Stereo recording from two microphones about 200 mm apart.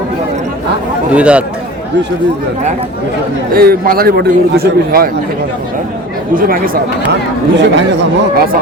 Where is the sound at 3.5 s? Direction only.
50° right (ahead or behind).